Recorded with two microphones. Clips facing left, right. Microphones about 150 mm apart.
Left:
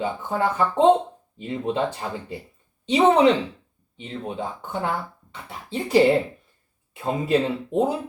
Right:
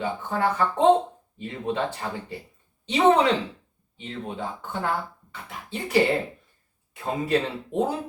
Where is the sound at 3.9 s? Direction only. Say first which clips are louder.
Left 3 dB; 20° left (ahead or behind).